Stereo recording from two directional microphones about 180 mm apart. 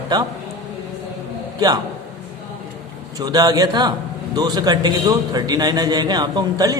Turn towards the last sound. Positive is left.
turn(degrees=-20)  # may be behind; listen again after turning